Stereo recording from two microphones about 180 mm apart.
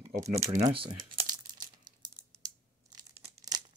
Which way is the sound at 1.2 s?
25° right (ahead or behind).